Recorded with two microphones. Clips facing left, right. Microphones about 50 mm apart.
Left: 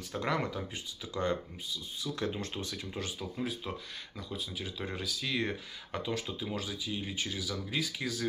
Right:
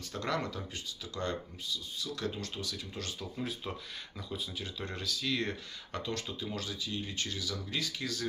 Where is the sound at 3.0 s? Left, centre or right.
Centre.